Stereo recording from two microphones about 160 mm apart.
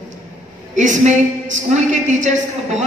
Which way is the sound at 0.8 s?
50° right (ahead or behind).